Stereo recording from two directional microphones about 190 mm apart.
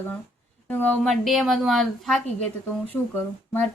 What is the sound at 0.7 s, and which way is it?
A woman's voice, 5° left (ahead or behind).